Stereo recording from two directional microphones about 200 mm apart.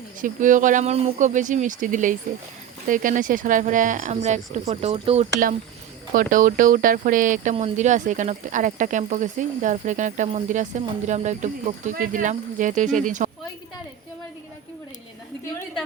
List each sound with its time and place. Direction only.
0.2 s speech: 40° right (ahead or behind)